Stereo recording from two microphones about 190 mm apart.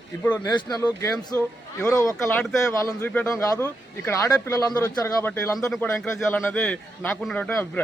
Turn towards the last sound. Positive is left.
turn(degrees=10)  # may be behind; listen again after turning